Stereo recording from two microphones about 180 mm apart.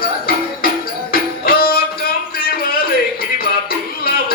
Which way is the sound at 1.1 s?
55° left (ahead or behind).